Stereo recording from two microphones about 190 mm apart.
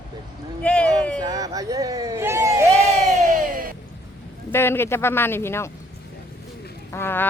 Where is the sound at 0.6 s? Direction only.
5° left (ahead or behind).